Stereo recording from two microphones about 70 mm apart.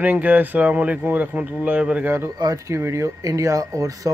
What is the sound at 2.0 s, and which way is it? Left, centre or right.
Speech, right.